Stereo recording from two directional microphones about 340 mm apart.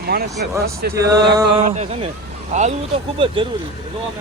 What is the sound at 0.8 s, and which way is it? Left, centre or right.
Speech, right.